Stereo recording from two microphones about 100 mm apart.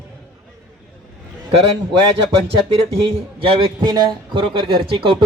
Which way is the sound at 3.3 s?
65° right (ahead or behind).